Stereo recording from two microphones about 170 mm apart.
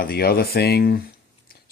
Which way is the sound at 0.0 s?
65° left (ahead or behind).